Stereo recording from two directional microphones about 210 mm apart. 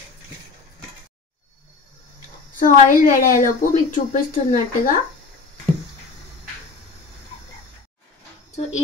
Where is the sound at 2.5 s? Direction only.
40° left (ahead or behind).